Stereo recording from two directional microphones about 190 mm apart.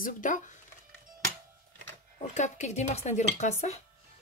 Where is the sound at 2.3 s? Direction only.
40° left (ahead or behind).